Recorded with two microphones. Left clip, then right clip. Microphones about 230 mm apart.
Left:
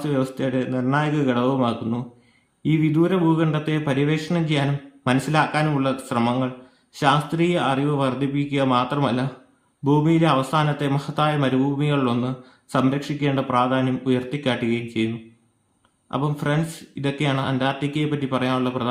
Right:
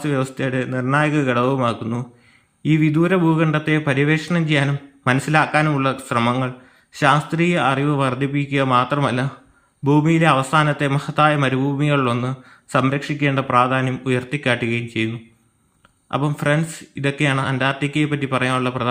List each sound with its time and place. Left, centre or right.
0.0 s a man's voice: centre
16.0 s a man's voice: centre